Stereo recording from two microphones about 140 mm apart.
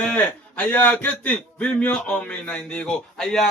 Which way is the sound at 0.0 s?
10° left (ahead or behind).